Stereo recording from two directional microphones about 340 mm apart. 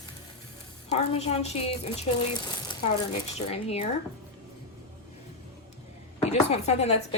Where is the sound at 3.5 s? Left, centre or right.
Centre.